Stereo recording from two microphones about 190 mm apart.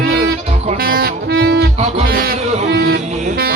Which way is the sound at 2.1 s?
50° right (ahead or behind).